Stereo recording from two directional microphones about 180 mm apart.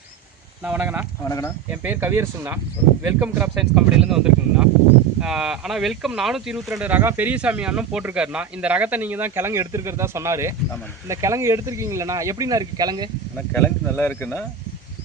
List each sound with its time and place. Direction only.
0.6 s speech: 10° right (ahead or behind)
1.2 s speech: 15° left (ahead or behind)
1.7 s speech: 10° right (ahead or behind)
13.5 s speech: 10° left (ahead or behind)